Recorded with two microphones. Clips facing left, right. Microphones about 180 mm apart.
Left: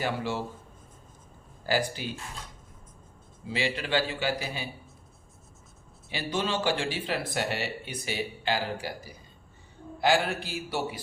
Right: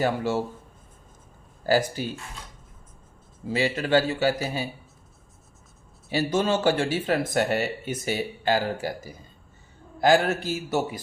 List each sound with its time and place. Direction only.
0.0 s speech: 45° right (ahead or behind)
1.6 s speech: 40° right (ahead or behind)
3.4 s speech: 45° right (ahead or behind)
6.1 s speech: 45° right (ahead or behind)